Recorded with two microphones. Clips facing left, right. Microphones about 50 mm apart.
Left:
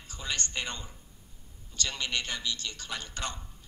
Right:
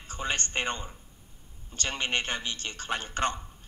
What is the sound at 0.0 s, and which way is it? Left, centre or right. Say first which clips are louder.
A man's voice: right 4 dB; right.